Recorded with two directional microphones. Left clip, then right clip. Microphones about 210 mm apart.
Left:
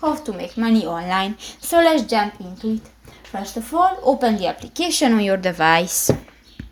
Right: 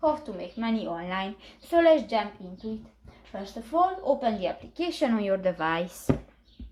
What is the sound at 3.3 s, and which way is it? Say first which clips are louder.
A woman's voice: left 6 dB; 45° left (ahead or behind).